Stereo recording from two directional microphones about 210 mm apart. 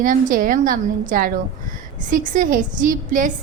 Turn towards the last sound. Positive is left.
turn(degrees=-40)  # may be behind; listen again after turning